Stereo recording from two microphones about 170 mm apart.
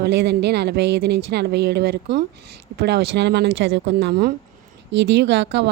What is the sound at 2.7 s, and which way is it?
Speech, 80° right.